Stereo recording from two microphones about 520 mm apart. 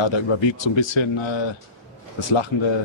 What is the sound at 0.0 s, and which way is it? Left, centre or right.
Speech, left.